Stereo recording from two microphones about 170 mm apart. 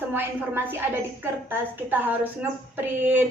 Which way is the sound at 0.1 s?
10° right (ahead or behind).